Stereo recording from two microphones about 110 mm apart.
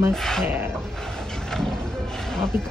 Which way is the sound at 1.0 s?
5° left (ahead or behind).